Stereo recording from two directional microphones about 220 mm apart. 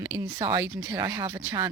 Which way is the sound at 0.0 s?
15° right (ahead or behind).